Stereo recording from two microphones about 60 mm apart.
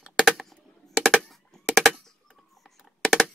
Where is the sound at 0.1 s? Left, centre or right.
Centre.